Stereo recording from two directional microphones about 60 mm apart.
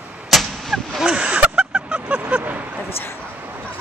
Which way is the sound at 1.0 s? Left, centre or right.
Centre.